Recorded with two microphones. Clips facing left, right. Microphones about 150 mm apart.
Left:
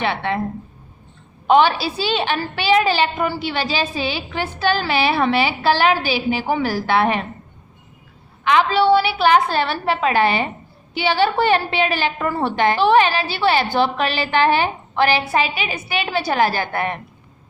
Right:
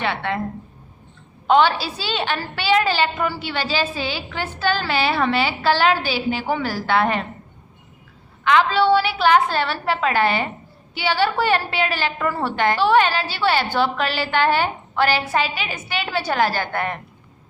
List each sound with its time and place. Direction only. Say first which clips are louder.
0.0 s a woman's voice: left 2 dB; 20° left (ahead or behind)
1.5 s a woman's voice: left 2 dB; 15° left (ahead or behind)
8.4 s a woman's voice: left 1 dB; 15° left (ahead or behind)